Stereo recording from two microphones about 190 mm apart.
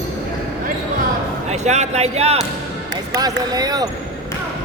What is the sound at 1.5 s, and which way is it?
Speech, 35° right (ahead or behind).